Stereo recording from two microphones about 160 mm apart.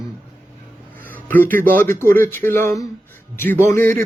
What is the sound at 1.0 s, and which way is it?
A man's voice, 10° left (ahead or behind).